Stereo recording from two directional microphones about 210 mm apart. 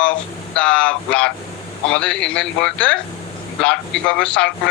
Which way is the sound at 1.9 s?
5° left (ahead or behind).